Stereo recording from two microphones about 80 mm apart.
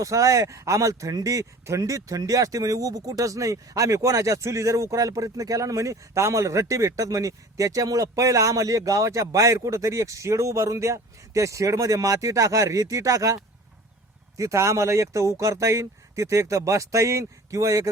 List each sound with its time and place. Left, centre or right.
0.0 s a man's voice: right